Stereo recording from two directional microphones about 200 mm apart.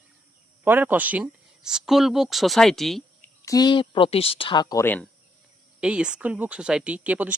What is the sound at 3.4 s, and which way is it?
Speech, 20° left (ahead or behind).